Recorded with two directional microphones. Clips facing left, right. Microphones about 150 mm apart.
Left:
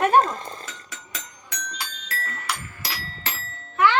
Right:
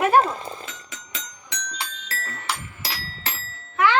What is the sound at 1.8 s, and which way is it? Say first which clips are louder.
Music: left 2 dB; 30° right (ahead or behind).